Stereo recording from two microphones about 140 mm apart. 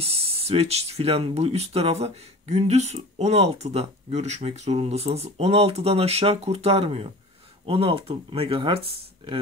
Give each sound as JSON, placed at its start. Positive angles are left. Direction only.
{"t": 0.0, "sound": "speech", "side_deg": -45}